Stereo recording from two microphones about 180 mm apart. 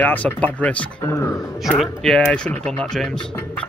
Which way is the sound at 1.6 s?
Centre (ahead or behind).